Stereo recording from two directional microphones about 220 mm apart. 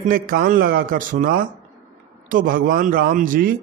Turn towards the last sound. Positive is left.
turn(degrees=-40)  # may be behind; listen again after turning